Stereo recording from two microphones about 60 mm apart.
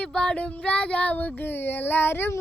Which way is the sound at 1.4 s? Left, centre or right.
Left.